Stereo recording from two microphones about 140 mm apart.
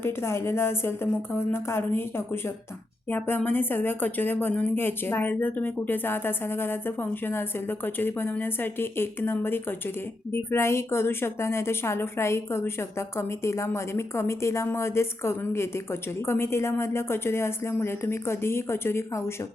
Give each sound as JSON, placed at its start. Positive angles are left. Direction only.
{"t": 0.0, "sound": "a woman's voice", "side_deg": 20}